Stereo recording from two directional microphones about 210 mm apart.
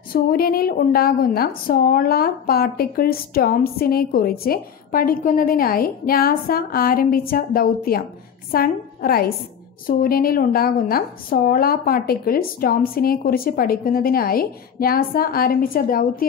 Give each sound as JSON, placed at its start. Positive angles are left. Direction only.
{"t": 0.1, "sound": "a woman's voice", "side_deg": 45}